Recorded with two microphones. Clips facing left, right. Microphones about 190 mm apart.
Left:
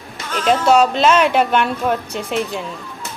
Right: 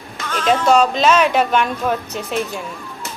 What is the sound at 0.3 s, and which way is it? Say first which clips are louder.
Speech: left 1 dB; 10° left (ahead or behind).